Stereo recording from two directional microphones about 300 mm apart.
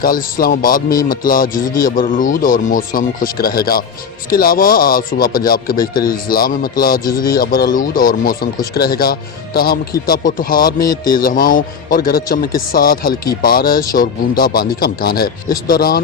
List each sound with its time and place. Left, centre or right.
0.0 s speech: left